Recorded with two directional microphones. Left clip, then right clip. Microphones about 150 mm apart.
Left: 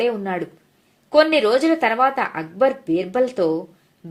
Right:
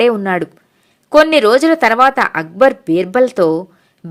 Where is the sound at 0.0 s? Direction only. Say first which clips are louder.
Right 9 dB; 40° right (ahead or behind).